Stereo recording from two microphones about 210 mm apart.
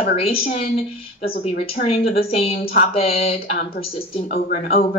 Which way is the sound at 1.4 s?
30° left (ahead or behind).